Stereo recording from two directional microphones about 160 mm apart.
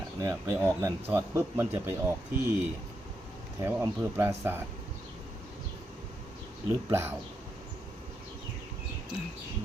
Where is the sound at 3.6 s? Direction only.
15° right (ahead or behind).